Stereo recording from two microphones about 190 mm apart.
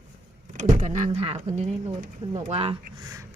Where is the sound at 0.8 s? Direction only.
35° right (ahead or behind).